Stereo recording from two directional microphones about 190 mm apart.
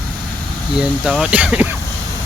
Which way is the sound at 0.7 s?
5° right (ahead or behind).